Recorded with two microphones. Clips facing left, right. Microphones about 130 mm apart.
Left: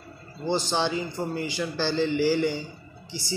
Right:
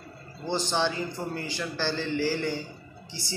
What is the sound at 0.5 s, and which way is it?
A man's voice, 10° left (ahead or behind).